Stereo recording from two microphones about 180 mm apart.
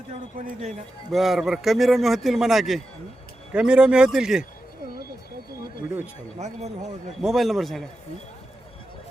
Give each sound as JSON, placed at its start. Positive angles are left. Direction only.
{"t": 0.3, "sound": "speech", "side_deg": -50}
{"t": 1.1, "sound": "a man's voice", "side_deg": 0}
{"t": 7.2, "sound": "a man's voice", "side_deg": 0}